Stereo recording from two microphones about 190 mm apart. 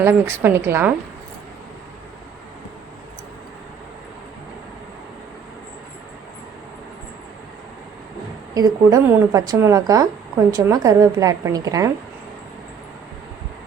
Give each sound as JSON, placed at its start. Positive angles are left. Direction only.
{"t": 0.0, "sound": "a woman's voice", "side_deg": -10}
{"t": 8.5, "sound": "a woman's voice", "side_deg": -20}